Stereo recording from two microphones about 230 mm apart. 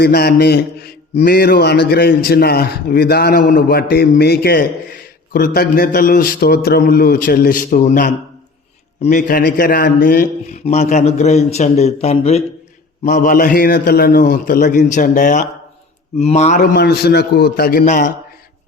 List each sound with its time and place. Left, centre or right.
0.0 s a man's voice: left